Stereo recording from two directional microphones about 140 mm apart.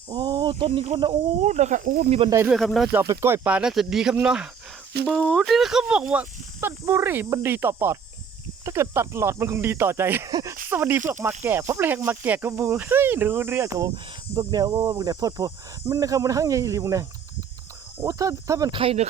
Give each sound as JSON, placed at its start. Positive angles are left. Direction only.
{"t": 0.1, "sound": "snake", "side_deg": -30}
{"t": 0.9, "sound": "speech", "side_deg": -35}
{"t": 1.4, "sound": "speech", "side_deg": -55}
{"t": 2.0, "sound": "speech", "side_deg": -45}
{"t": 2.5, "sound": "speech", "side_deg": 0}
{"t": 2.9, "sound": "speech", "side_deg": -20}
{"t": 5.0, "sound": "speech", "side_deg": 5}
{"t": 18.7, "sound": "speech", "side_deg": -45}